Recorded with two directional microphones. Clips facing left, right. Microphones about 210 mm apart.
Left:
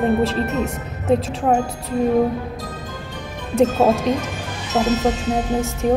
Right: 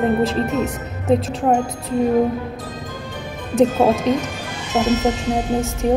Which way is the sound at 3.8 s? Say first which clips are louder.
Even; 15° right (ahead or behind).